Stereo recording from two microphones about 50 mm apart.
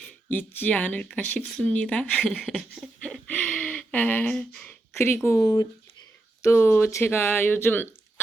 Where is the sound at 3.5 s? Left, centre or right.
Left.